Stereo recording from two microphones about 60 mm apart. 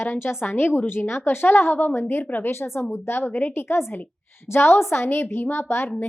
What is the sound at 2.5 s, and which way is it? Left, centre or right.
A woman's voice, left.